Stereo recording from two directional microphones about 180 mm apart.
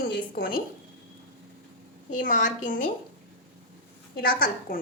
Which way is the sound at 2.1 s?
45° left (ahead or behind).